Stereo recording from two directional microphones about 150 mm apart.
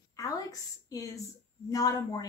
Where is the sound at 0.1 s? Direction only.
25° left (ahead or behind).